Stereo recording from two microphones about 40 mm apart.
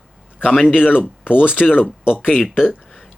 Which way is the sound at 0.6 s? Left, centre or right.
Centre.